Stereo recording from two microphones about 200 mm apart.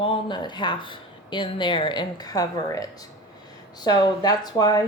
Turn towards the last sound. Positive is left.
turn(degrees=20)  # may be behind; listen again after turning